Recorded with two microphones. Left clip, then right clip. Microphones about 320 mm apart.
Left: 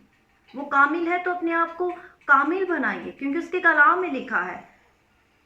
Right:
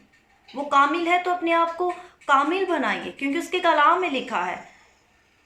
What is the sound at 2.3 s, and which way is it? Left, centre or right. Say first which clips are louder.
A woman's voice: left 1 dB; centre.